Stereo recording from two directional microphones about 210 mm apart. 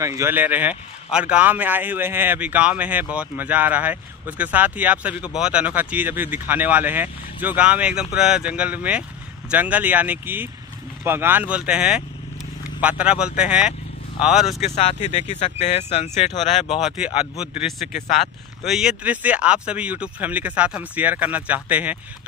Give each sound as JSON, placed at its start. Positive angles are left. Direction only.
{"t": 0.0, "sound": "speech", "side_deg": -15}
{"t": 14.6, "sound": "speech", "side_deg": 30}
{"t": 16.8, "sound": "speech", "side_deg": -5}